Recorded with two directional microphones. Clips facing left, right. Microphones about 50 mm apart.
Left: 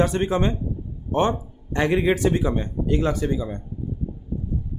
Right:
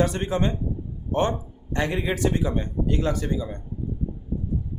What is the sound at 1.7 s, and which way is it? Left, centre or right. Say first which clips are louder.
Speech: left 5 dB; left.